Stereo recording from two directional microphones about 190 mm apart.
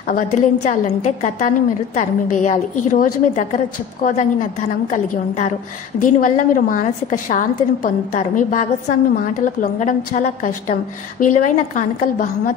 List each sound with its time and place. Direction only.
0.1 s a woman's voice: 40° left (ahead or behind)